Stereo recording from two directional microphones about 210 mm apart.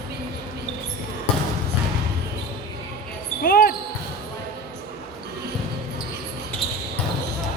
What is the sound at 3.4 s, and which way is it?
Speech, 45° left (ahead or behind).